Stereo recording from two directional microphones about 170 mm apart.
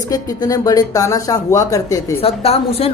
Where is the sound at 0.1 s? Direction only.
20° left (ahead or behind).